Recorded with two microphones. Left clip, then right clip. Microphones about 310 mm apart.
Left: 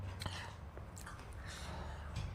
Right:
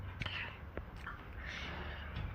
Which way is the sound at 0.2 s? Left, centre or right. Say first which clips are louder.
Right 5 dB; left.